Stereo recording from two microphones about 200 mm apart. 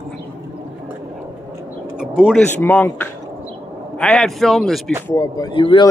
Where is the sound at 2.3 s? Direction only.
5° left (ahead or behind).